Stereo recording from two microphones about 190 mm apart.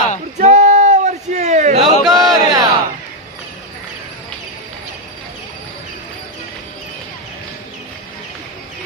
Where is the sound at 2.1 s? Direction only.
20° right (ahead or behind).